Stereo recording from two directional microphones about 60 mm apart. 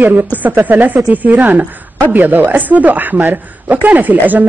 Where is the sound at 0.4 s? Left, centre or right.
Right.